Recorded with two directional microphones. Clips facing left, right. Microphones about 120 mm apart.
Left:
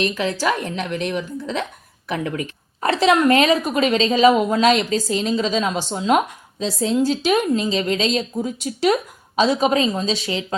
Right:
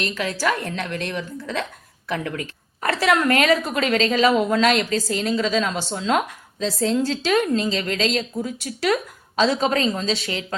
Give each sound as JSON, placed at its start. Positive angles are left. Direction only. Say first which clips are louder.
{"t": 0.0, "sound": "a woman's voice", "louder": "left 3 dB", "side_deg": 20}